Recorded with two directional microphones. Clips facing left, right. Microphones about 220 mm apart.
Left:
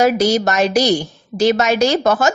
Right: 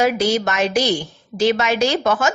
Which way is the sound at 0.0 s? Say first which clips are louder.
Left 3 dB; 40° left (ahead or behind).